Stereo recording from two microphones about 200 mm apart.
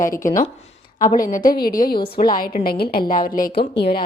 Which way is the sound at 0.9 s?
45° left (ahead or behind).